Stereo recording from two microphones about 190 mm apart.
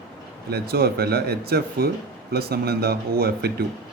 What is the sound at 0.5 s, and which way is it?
Speech, 55° right (ahead or behind).